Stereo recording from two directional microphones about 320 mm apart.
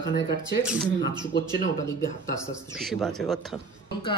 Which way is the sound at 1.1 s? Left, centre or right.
Centre.